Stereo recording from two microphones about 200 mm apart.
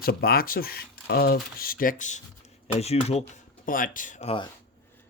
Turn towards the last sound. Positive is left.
turn(degrees=30)  # may be behind; listen again after turning